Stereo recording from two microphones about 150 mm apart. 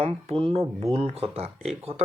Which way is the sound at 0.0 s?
40° right (ahead or behind).